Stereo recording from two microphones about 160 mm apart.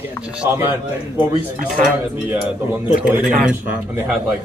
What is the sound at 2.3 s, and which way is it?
Speech, 10° right (ahead or behind).